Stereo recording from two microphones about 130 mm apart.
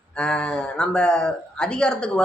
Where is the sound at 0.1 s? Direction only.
5° left (ahead or behind).